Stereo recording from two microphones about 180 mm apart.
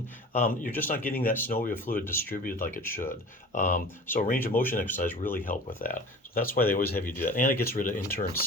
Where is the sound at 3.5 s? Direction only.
45° left (ahead or behind).